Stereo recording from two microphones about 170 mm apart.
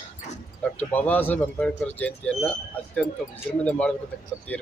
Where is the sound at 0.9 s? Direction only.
10° left (ahead or behind).